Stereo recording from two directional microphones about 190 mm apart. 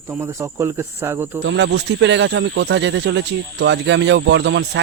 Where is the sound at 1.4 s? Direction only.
70° right (ahead or behind).